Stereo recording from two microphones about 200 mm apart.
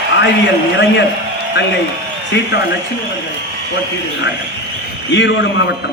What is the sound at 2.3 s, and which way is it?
Speech, 65° left (ahead or behind).